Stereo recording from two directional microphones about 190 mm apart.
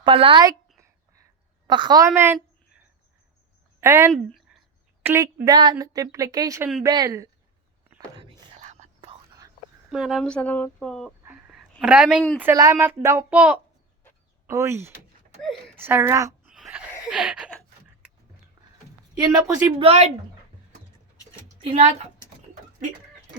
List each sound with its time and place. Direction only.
0.0 s a woman's voice: 25° right (ahead or behind)
1.6 s a woman's voice: 25° right (ahead or behind)
4.1 s a sound: centre (ahead or behind)
5.0 s a woman's voice: 15° right (ahead or behind)
8.5 s whispering: 40° right (ahead or behind)
9.9 s speech: centre (ahead or behind)
11.5 s a sound: 5° right (ahead or behind)
12.4 s speech: 15° right (ahead or behind)
16.5 s a sound: 5° right (ahead or behind)
17.1 s speech: 5° right (ahead or behind)
19.1 s a woman's voice: 20° right (ahead or behind)
19.8 s a woman's voice: 35° right (ahead or behind)
21.6 s a woman's voice: 30° right (ahead or behind)